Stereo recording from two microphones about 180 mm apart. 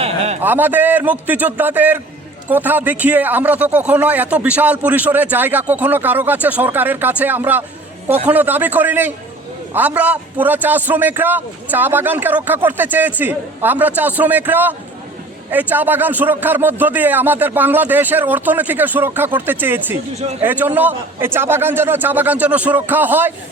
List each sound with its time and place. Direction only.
0.4 s speech: 10° right (ahead or behind)
20.1 s a man's voice: 40° right (ahead or behind)
20.4 s speech: 10° right (ahead or behind)